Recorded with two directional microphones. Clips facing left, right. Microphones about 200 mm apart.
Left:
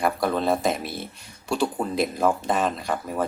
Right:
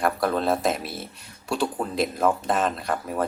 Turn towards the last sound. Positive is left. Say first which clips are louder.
# even
turn(degrees=0)  # may be behind; listen again after turning